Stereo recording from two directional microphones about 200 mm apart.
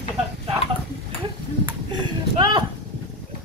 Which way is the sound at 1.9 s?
20° right (ahead or behind).